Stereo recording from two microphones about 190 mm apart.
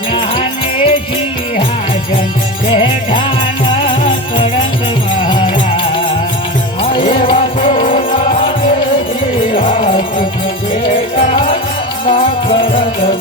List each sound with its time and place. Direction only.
0.1 s music: 25° left (ahead or behind)
2.6 s music: 25° left (ahead or behind)
6.9 s music: 25° left (ahead or behind)
7.7 s music: 45° left (ahead or behind)
9.5 s music: 30° left (ahead or behind)
11.3 s music: 30° left (ahead or behind)